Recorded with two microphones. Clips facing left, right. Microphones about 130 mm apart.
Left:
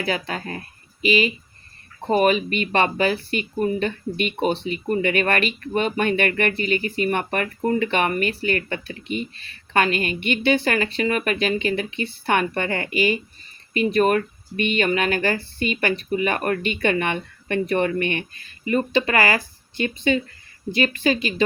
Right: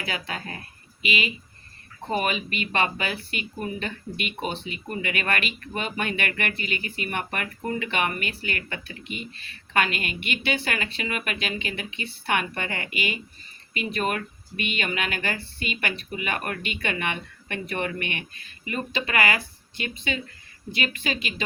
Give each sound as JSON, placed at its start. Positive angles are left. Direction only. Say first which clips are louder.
{"t": 0.0, "sound": "speech", "louder": "left 7 dB", "side_deg": 40}